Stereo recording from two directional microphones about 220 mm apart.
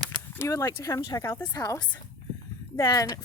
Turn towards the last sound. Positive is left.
turn(degrees=15)  # may be behind; listen again after turning